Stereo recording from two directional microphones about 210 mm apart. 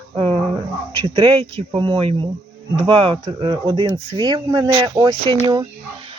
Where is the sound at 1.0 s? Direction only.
25° right (ahead or behind).